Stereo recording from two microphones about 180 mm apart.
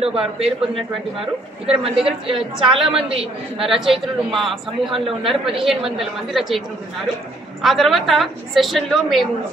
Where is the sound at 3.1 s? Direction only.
30° right (ahead or behind).